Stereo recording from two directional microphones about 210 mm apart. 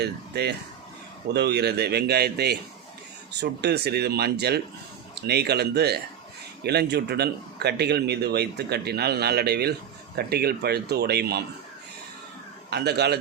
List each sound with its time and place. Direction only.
0.0 s speech: 50° right (ahead or behind)
12.7 s speech: 50° right (ahead or behind)